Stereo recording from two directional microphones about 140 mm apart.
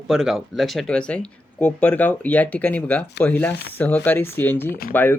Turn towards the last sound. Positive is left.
turn(degrees=15)  # may be behind; listen again after turning